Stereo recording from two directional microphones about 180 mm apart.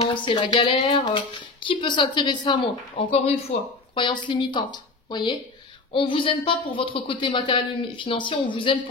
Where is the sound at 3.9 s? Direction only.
25° left (ahead or behind).